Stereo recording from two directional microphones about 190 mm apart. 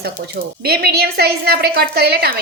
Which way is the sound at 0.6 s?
55° right (ahead or behind).